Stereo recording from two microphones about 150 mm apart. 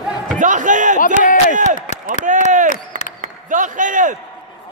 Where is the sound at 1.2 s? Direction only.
60° left (ahead or behind).